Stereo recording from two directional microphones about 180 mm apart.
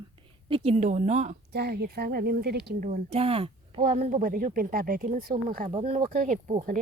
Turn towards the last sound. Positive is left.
turn(degrees=-45)  # may be behind; listen again after turning